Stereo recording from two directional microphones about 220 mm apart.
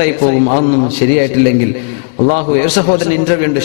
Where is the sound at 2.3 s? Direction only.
35° right (ahead or behind).